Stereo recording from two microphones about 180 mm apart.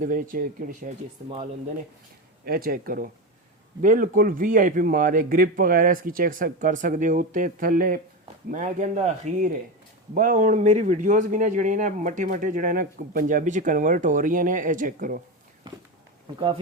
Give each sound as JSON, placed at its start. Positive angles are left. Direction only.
{"t": 0.0, "sound": "a man's voice", "side_deg": -50}
{"t": 2.4, "sound": "a man's voice", "side_deg": -55}